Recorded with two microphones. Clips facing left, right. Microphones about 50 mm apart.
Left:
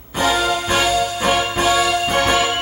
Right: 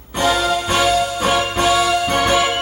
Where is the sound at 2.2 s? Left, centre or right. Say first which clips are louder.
Right 2 dB; centre.